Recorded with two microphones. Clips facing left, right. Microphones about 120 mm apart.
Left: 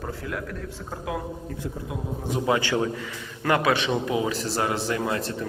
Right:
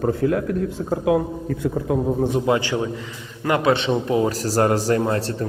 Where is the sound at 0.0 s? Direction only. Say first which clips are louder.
Right 14 dB; 50° right (ahead or behind).